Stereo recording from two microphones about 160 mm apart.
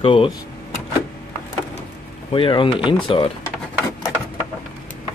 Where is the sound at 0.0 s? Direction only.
35° left (ahead or behind).